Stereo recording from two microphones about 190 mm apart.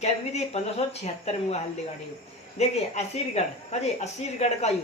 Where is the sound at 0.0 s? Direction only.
35° left (ahead or behind).